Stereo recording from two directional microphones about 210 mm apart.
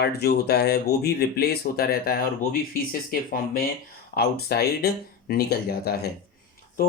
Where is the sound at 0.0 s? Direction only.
50° left (ahead or behind).